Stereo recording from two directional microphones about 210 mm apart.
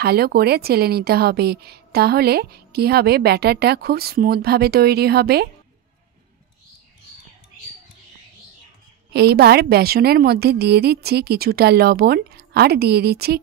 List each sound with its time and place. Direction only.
0.0 s speech: 50° right (ahead or behind)
9.1 s speech: 50° right (ahead or behind)